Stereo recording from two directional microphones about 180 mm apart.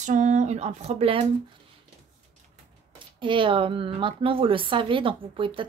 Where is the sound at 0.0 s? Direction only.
45° right (ahead or behind).